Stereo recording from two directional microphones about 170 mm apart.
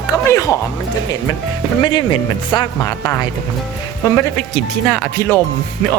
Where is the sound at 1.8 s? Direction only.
25° left (ahead or behind).